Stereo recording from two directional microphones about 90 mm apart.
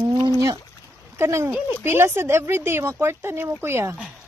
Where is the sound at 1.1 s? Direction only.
30° right (ahead or behind).